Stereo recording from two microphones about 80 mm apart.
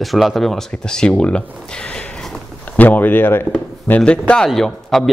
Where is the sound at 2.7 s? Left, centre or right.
Left.